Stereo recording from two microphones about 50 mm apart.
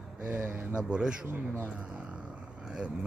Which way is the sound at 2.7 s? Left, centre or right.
Centre.